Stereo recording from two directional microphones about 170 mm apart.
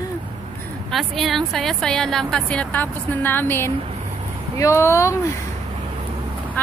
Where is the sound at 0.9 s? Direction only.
Centre (ahead or behind); by 5.1 s 15° left (ahead or behind).